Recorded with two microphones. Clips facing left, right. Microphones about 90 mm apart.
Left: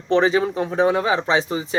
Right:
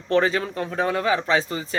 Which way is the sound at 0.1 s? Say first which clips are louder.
Left 3 dB; 15° left (ahead or behind).